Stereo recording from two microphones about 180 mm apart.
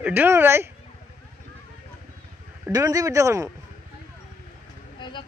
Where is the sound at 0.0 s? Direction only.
10° right (ahead or behind).